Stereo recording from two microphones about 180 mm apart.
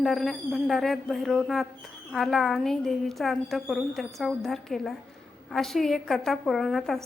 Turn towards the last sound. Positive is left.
turn(degrees=0)  # may be behind; listen again after turning